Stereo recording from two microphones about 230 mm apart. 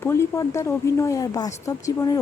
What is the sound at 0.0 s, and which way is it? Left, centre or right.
Speech, centre.